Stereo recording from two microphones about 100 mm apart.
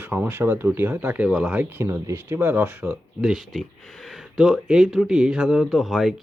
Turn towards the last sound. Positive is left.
turn(degrees=0)  # may be behind; listen again after turning